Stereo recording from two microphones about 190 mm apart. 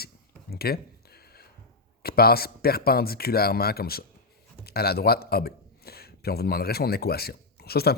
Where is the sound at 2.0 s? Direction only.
55° left (ahead or behind).